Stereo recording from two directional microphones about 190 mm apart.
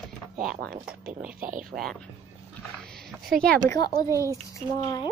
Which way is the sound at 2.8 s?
Centre (ahead or behind).